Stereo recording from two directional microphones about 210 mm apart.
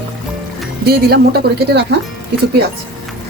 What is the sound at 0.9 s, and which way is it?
Speech, 50° right (ahead or behind).